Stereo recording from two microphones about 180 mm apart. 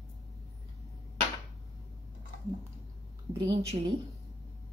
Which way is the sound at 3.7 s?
30° right (ahead or behind).